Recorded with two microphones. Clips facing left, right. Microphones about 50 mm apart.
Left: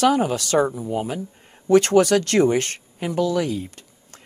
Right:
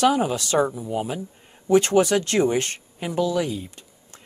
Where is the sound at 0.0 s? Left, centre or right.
Left.